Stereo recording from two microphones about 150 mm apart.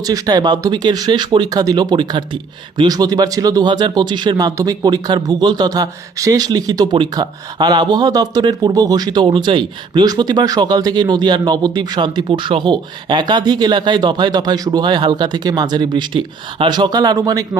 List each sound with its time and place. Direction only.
0.0 s speech: 25° right (ahead or behind)